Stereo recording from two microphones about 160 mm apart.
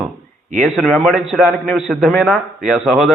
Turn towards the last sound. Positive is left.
turn(degrees=0)  # may be behind; listen again after turning